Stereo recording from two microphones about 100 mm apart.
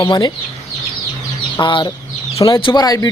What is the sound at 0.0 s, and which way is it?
Speech, 50° left (ahead or behind).